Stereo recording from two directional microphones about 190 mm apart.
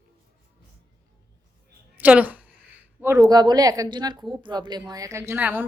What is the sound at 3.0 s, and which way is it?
A woman's voice, 15° right (ahead or behind).